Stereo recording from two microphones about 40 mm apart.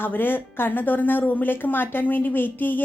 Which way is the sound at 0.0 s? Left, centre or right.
Left.